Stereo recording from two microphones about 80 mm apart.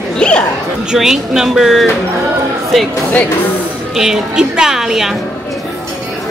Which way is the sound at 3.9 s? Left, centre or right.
Centre.